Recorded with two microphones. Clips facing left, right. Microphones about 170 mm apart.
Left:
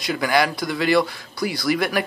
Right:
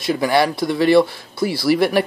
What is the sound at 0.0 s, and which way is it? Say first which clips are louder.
Speech: right 4 dB; 25° right (ahead or behind).